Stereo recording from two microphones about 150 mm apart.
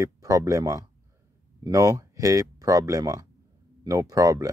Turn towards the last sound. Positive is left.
turn(degrees=-25)  # may be behind; listen again after turning